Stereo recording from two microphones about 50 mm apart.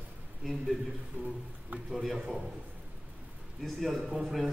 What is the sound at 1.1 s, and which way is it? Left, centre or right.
Speech, right.